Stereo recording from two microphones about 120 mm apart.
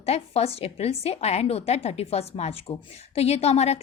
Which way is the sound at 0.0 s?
60° left (ahead or behind).